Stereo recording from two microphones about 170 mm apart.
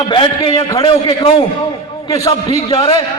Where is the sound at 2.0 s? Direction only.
20° left (ahead or behind).